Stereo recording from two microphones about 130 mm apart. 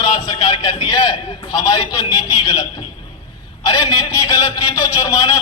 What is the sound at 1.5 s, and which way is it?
Speech, 30° left (ahead or behind).